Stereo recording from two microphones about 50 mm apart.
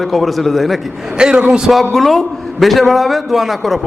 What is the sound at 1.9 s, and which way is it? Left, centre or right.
A man's voice, centre.